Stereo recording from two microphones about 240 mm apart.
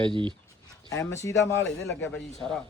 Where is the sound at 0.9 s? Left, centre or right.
Centre.